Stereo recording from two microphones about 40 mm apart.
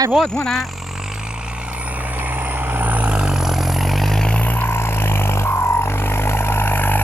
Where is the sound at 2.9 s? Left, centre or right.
Right.